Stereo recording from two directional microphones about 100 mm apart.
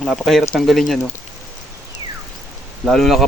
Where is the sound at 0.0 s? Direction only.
Centre (ahead or behind).